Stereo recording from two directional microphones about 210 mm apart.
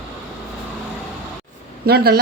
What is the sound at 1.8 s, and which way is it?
Speech, 50° right (ahead or behind).